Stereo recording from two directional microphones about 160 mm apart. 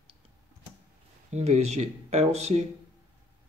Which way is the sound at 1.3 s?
45° right (ahead or behind).